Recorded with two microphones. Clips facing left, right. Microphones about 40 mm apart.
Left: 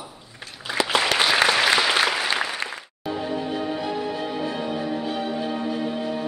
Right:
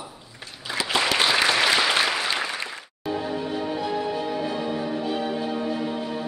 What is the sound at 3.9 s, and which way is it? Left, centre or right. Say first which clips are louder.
Music: right 1 dB; centre.